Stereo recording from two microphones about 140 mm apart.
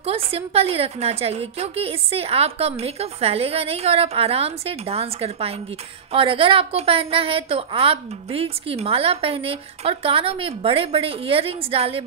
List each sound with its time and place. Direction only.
0.0 s a woman's voice: 45° right (ahead or behind)